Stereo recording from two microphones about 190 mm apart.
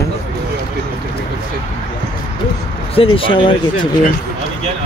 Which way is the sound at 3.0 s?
30° left (ahead or behind).